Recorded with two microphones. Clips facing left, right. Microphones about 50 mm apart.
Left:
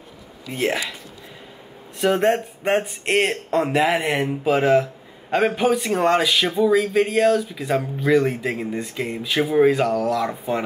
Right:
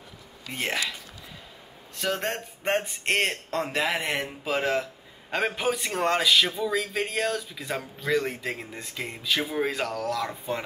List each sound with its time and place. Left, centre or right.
0.5 s speech: centre
2.0 s speech: centre
6.4 s speech: centre
6.7 s speech: centre